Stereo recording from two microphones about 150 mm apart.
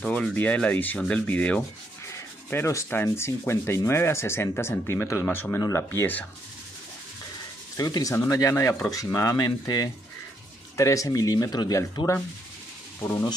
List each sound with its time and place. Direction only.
0.0 s sanding: 5° left (ahead or behind)
7.7 s speech: 25° left (ahead or behind)